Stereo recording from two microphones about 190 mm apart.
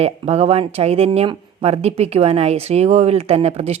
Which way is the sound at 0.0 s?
35° right (ahead or behind).